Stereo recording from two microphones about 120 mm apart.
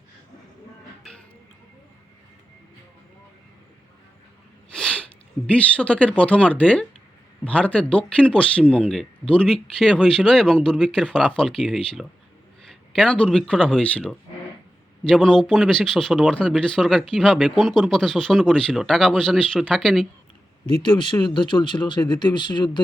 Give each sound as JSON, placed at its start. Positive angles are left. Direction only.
{"t": 4.7, "sound": "sneeze", "side_deg": 5}
{"t": 5.5, "sound": "speech", "side_deg": 10}
{"t": 20.8, "sound": "speech", "side_deg": 40}